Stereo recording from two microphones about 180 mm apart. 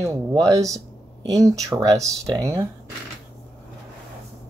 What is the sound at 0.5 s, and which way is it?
Speech, 15° right (ahead or behind).